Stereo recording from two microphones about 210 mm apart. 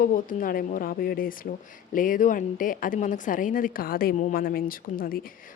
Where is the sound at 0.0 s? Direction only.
40° left (ahead or behind).